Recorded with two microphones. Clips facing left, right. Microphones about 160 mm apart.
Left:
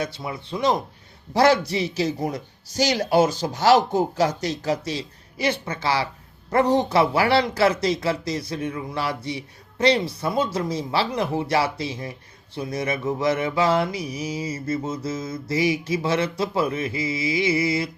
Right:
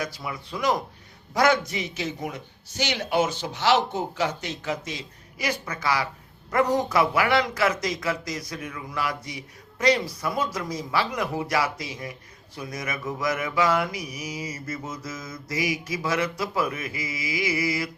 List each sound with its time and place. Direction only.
0.0 s a man's voice: 25° left (ahead or behind)